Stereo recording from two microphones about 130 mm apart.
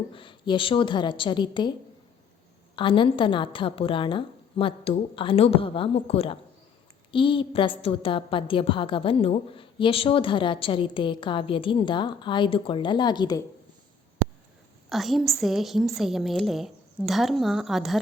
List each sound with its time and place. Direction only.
0.1 s a woman's voice: 40° left (ahead or behind)
2.7 s a woman's voice: 40° left (ahead or behind)
14.8 s a woman's voice: centre (ahead or behind)